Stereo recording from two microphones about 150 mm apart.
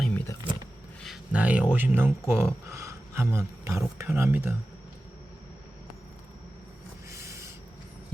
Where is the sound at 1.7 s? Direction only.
10° right (ahead or behind).